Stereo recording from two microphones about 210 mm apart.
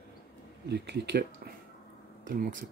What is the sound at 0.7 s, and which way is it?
Speech, 50° right (ahead or behind).